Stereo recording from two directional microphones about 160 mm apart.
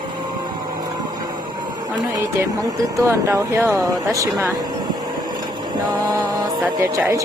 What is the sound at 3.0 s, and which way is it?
Speech, 20° right (ahead or behind).